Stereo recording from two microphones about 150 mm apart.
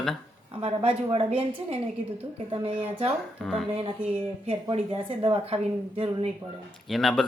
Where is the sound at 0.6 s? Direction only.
40° right (ahead or behind).